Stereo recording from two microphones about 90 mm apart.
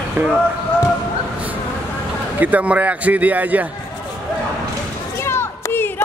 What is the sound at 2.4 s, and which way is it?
A man's voice, 15° right (ahead or behind).